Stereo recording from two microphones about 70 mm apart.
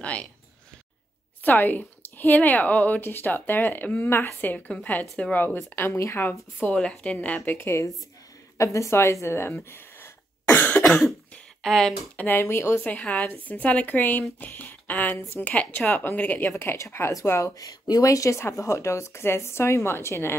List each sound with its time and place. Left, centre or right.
0.0 s speech: centre
1.4 s speech: left
6.7 s a woman's voice: centre
7.5 s a woman's voice: left
10.5 s cough: left
10.9 s cough: centre
11.6 s speech: centre
12.2 s speech: left
12.8 s speech: left
15.1 s speech: left
15.4 s speech: left
17.6 s speech: left